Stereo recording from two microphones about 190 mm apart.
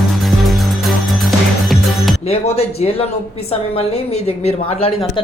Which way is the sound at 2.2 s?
30° left (ahead or behind).